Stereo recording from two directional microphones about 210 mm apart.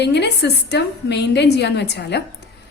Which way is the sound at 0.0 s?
55° left (ahead or behind).